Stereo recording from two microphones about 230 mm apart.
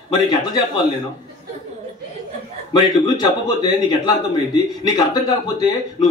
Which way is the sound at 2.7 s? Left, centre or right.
Centre.